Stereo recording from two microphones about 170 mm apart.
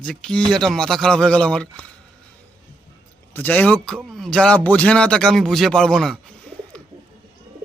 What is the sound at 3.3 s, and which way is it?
A man's voice, 10° left (ahead or behind).